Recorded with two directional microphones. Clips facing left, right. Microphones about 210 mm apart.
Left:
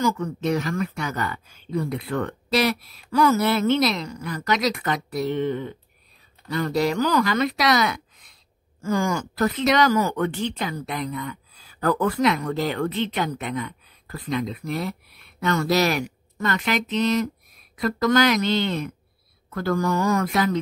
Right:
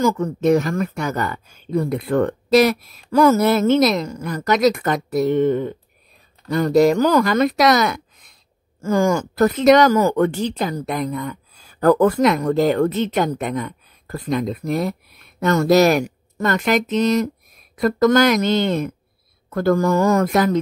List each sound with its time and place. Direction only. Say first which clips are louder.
0.0 s speech: right 6 dB; 45° right (ahead or behind)